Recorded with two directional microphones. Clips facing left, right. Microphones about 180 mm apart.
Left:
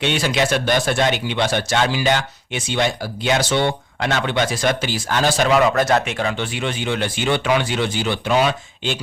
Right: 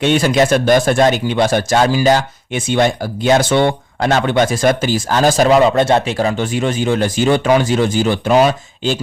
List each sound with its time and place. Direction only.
0.0 s speech: 45° right (ahead or behind)